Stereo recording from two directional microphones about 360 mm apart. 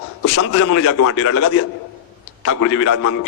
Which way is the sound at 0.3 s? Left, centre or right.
Left.